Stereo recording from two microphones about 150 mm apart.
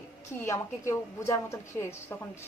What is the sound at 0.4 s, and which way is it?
A woman's voice, 20° left (ahead or behind).